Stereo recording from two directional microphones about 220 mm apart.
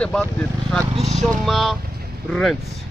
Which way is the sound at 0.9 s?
30° right (ahead or behind).